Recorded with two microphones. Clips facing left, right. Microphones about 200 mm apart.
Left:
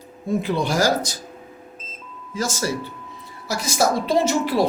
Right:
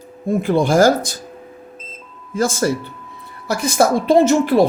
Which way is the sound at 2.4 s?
55° right (ahead or behind).